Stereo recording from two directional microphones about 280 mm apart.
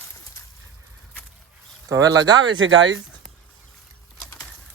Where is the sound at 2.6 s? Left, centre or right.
Right.